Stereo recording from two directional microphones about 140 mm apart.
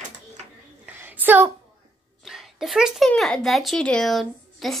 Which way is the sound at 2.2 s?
Centre (ahead or behind).